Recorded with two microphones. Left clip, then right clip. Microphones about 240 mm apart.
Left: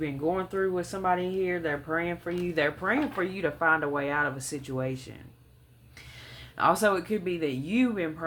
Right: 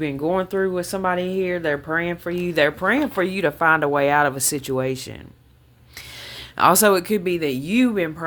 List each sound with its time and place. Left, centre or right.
0.0 s speech: right
6.6 s speech: right